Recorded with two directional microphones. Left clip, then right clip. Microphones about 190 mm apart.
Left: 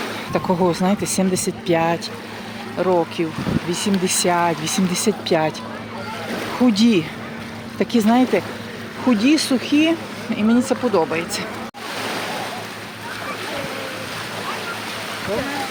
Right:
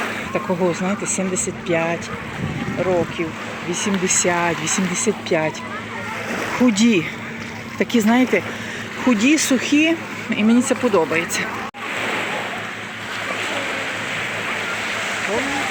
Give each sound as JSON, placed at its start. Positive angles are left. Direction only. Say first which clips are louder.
{"t": 0.3, "sound": "speech", "louder": "left 2 dB", "side_deg": 25}
{"t": 3.7, "sound": "speech", "louder": "right 2 dB", "side_deg": 20}
{"t": 6.6, "sound": "speech", "louder": "even", "side_deg": 5}